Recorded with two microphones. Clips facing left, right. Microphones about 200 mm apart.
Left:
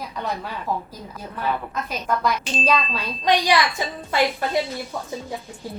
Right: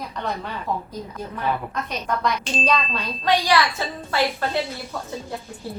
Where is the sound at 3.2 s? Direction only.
15° left (ahead or behind).